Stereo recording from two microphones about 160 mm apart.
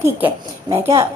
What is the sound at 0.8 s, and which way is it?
Speech, 20° right (ahead or behind).